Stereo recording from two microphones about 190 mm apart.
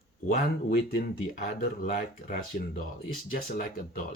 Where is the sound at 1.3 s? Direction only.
45° left (ahead or behind).